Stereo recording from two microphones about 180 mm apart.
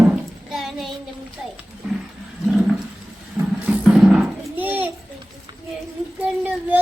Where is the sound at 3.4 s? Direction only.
10° right (ahead or behind).